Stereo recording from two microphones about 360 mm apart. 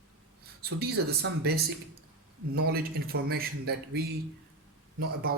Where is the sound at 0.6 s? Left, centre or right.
Right.